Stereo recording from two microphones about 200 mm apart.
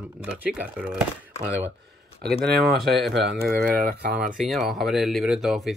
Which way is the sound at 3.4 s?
50° right (ahead or behind).